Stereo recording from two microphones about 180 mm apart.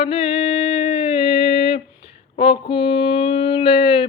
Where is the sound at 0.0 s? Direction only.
35° left (ahead or behind).